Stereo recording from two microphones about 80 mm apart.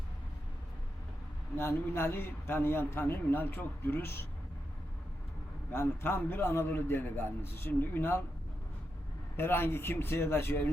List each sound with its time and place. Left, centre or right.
1.5 s a man's voice: left
5.7 s a man's voice: left
9.3 s a man's voice: left